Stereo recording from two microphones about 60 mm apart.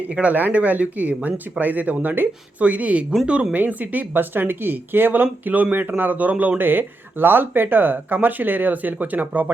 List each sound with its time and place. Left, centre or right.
0.1 s speech: right
6.6 s speech: right